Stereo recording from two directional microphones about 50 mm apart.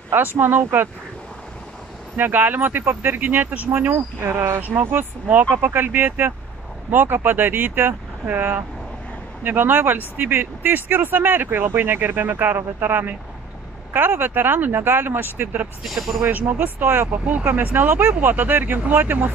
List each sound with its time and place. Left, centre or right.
0.4 s speech: right
2.1 s speech: right
3.9 s speech: right
4.6 s speech: right
15.8 s speech: centre
16.3 s speech: right
17.3 s speech: right